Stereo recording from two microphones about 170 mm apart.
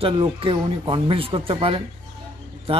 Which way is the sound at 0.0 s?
30° right (ahead or behind).